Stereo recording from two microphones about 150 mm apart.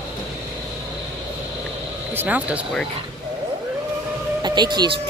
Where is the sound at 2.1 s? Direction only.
10° right (ahead or behind).